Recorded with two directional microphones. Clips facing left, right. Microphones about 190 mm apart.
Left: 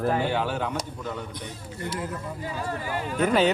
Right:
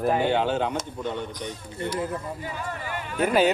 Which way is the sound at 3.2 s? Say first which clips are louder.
Right 1 dB; 10° right (ahead or behind).